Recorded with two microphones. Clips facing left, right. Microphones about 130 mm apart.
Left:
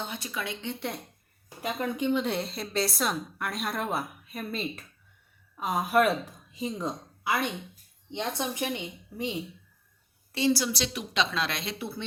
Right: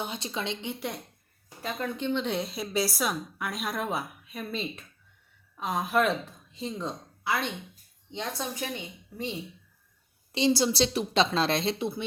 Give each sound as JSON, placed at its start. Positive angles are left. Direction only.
{"t": 0.0, "sound": "a woman's voice", "side_deg": -20}
{"t": 1.5, "sound": "a woman's voice", "side_deg": 15}
{"t": 10.3, "sound": "a woman's voice", "side_deg": -20}